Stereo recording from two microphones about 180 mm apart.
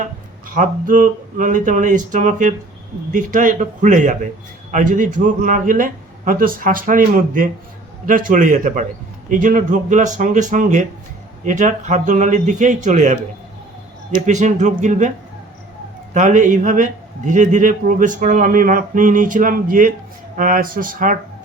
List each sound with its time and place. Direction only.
0.5 s a man's voice: 45° right (ahead or behind)
14.3 s a man's voice: 40° right (ahead or behind)
16.1 s a man's voice: 45° right (ahead or behind)